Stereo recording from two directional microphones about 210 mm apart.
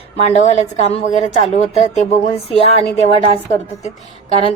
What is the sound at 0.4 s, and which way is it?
A woman's voice, 30° left (ahead or behind).